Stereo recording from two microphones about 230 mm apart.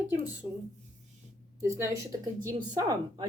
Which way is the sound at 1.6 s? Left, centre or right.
Centre.